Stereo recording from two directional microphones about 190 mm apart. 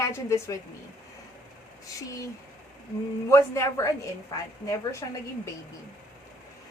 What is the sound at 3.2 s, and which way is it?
A woman's voice, 15° left (ahead or behind).